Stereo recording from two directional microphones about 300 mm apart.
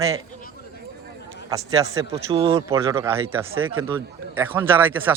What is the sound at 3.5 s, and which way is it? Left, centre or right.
Speech, right.